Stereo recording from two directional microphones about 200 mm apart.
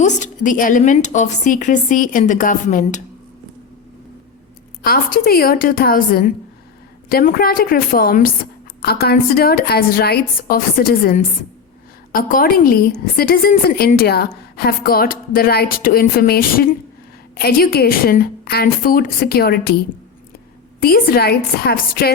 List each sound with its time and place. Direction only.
0.0 s a woman's voice: 40° left (ahead or behind)
4.8 s a woman's voice: 45° left (ahead or behind)
20.8 s a woman's voice: 50° left (ahead or behind)